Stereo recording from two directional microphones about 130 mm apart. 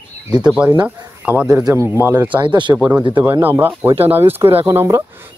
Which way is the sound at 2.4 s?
35° right (ahead or behind).